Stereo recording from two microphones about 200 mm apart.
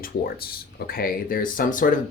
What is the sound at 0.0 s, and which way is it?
Speech, 50° left (ahead or behind).